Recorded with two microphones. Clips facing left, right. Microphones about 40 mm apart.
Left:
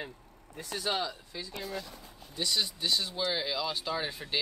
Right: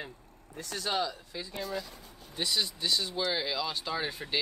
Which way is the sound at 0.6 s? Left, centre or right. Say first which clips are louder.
Right 1 dB; centre.